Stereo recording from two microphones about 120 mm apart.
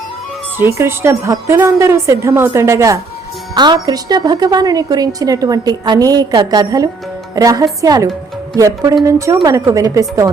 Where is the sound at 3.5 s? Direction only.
35° right (ahead or behind).